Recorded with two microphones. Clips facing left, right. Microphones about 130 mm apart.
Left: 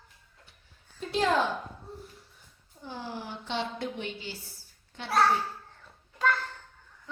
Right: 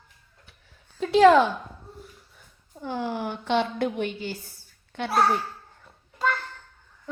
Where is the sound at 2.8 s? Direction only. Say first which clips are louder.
Right 9 dB; 70° right (ahead or behind); by 4.3 s 50° right (ahead or behind).